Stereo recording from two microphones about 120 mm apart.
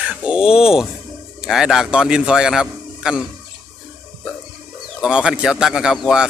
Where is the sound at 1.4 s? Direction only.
Centre (ahead or behind).